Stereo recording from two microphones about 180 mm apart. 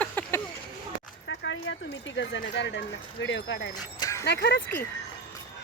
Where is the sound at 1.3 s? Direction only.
90° left.